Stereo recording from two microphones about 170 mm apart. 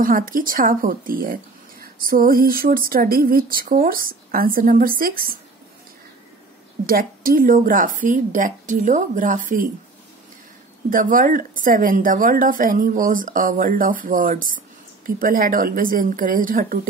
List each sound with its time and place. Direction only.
0.0 s speech: 55° right (ahead or behind)
6.9 s a woman's voice: 55° right (ahead or behind)
10.9 s a woman's voice: 50° right (ahead or behind)